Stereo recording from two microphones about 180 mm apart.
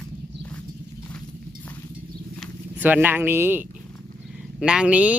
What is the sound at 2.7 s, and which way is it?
Speech, 10° right (ahead or behind).